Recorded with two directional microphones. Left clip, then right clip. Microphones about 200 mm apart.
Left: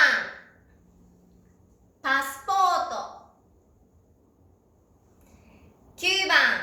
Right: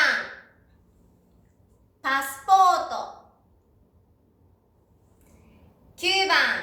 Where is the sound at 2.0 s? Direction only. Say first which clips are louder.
Even; 15° right (ahead or behind).